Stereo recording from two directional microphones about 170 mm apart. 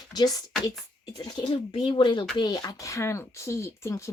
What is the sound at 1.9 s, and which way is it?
Speech, 30° left (ahead or behind).